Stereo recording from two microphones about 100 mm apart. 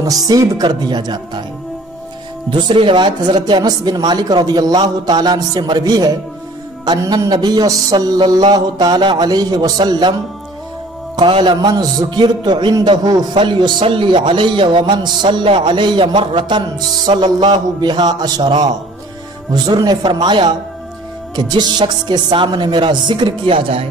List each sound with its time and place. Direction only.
0.0 s a man's voice: 40° right (ahead or behind)
2.5 s a man's voice: 60° right (ahead or behind)